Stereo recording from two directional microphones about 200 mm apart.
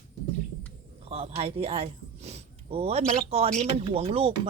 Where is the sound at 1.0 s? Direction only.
30° right (ahead or behind).